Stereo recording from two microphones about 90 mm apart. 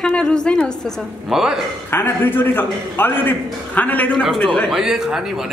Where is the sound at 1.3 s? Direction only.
5° right (ahead or behind).